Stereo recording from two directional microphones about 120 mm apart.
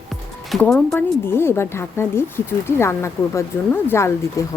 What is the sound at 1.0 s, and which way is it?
Speech, 20° left (ahead or behind).